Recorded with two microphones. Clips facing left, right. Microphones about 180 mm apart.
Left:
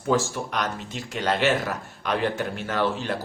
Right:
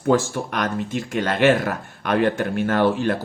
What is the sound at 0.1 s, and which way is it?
Speech, 55° right (ahead or behind).